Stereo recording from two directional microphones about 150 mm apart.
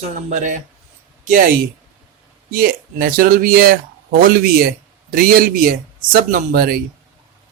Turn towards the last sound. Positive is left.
turn(degrees=-85)